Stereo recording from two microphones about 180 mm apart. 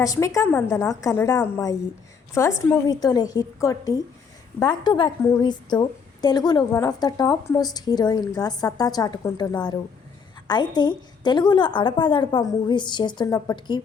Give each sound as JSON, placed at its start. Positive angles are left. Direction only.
{"t": 0.0, "sound": "a woman's voice", "side_deg": 20}